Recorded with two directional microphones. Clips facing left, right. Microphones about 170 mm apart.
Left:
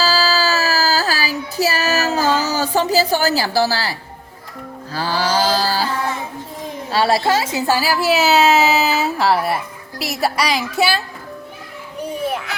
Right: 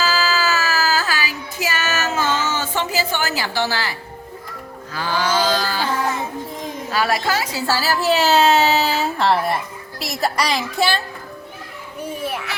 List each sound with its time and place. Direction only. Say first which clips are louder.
0.0 s child singing: left 2 dB; 35° left (ahead or behind)
4.9 s mantra: left 1 dB; 35° left (ahead or behind)
6.9 s a woman's voice: left 4 dB; 30° left (ahead or behind)
7.7 s speech: left 1 dB; 10° left (ahead or behind)